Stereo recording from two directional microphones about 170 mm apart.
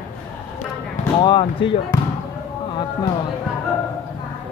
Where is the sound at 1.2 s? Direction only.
25° left (ahead or behind).